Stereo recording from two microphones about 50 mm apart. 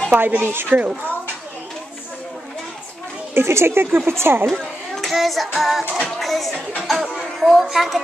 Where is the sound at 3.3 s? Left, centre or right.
Right.